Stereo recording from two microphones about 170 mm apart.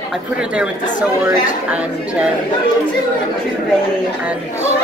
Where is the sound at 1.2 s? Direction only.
10° right (ahead or behind).